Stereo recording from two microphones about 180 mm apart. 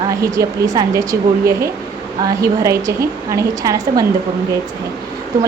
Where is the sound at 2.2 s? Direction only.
15° right (ahead or behind).